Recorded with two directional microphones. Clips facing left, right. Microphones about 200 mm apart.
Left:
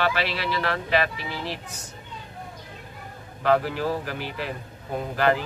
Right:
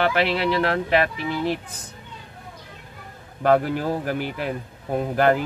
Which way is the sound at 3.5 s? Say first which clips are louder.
Right 3 dB; 50° right (ahead or behind).